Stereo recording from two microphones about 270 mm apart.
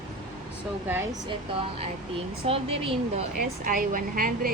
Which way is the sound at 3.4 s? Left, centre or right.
Right.